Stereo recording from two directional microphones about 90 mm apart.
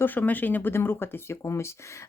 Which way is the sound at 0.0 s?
20° left (ahead or behind).